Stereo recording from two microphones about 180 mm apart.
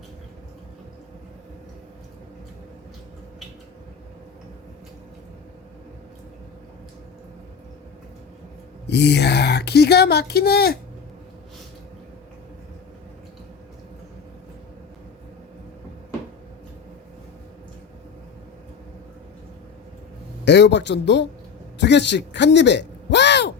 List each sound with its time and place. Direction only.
8.9 s speech: 70° left (ahead or behind)
20.4 s speech: 70° left (ahead or behind)